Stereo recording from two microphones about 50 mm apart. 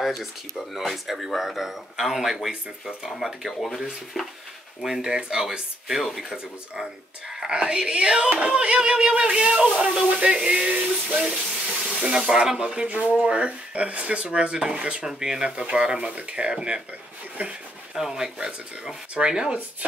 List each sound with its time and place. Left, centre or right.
0.0 s speech: centre
4.8 s speech: centre
5.9 s speech: centre
6.3 s speech: centre
12.0 s speech: right
17.4 s speech: right
17.9 s speech: centre